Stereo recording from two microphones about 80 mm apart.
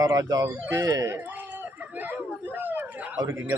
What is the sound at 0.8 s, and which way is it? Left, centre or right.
Speech, right.